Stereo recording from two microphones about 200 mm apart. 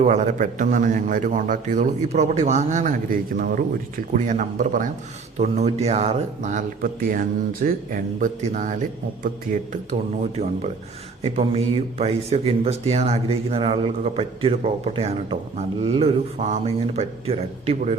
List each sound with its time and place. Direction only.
0.0 s a man's voice: 35° right (ahead or behind)
11.2 s speech: 30° right (ahead or behind)